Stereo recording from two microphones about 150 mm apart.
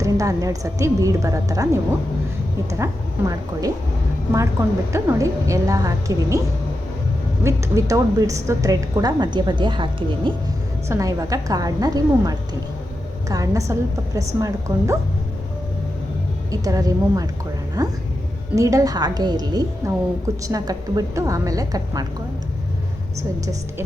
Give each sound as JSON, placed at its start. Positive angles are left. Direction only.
{"t": 0.0, "sound": "a woman's voice", "side_deg": -20}
{"t": 4.9, "sound": "a woman's voice", "side_deg": -20}
{"t": 7.4, "sound": "a woman's voice", "side_deg": -20}
{"t": 10.8, "sound": "a woman's voice", "side_deg": -20}
{"t": 16.5, "sound": "a woman's voice", "side_deg": -25}